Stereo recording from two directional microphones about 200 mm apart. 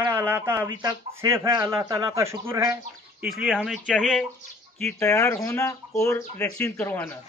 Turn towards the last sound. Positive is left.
turn(degrees=10)  # may be behind; listen again after turning